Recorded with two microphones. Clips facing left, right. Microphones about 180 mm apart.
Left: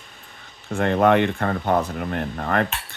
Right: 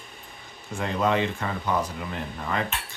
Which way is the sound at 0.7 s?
60° left (ahead or behind).